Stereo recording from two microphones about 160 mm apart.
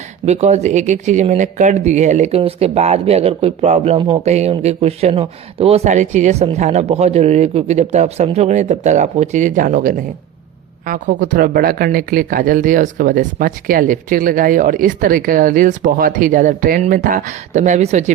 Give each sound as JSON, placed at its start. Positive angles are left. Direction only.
{"t": 0.3, "sound": "speech", "side_deg": -45}